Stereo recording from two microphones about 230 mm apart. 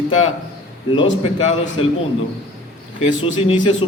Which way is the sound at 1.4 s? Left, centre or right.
Left.